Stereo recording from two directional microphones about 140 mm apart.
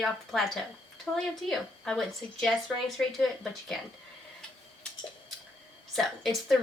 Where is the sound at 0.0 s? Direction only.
Centre (ahead or behind).